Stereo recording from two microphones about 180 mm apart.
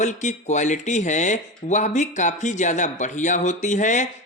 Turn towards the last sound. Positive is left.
turn(degrees=45)  # may be behind; listen again after turning